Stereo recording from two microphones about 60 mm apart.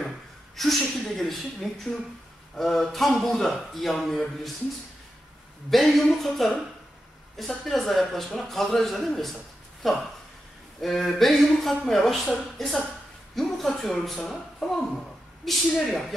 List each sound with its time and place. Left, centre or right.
0.6 s speech: centre
5.7 s speech: centre